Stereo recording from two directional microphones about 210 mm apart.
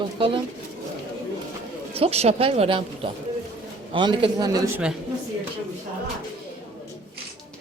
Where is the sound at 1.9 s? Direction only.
30° right (ahead or behind).